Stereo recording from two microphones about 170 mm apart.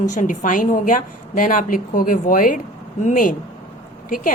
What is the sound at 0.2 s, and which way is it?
A woman's voice, 50° left (ahead or behind).